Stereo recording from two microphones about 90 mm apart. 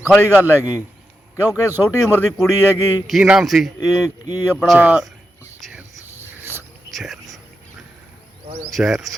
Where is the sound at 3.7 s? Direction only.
45° left (ahead or behind).